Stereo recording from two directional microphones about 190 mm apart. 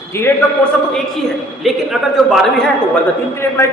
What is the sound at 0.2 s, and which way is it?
A man's voice, 5° left (ahead or behind).